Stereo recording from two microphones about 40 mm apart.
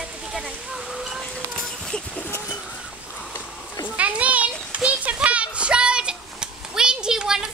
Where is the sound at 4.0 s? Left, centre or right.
Right; by 7.5 s centre.